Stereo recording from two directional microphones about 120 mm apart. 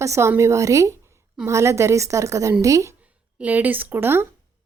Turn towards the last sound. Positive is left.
turn(degrees=-20)  # may be behind; listen again after turning